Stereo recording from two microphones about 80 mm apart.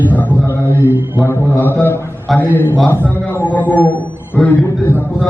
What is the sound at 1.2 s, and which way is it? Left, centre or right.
A man's voice, left.